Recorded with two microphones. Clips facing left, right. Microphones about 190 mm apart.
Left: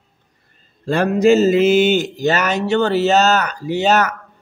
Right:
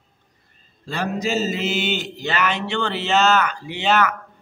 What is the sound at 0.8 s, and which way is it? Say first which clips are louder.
Speech: left 11 dB; 55° left (ahead or behind).